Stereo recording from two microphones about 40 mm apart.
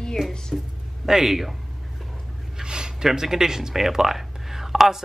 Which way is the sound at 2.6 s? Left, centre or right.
Centre.